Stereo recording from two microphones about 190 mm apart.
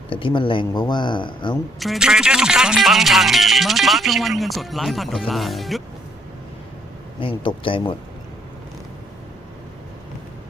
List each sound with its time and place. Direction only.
0.1 s speech: 25° left (ahead or behind)
1.8 s speech: centre (ahead or behind)
7.2 s speech: 25° left (ahead or behind)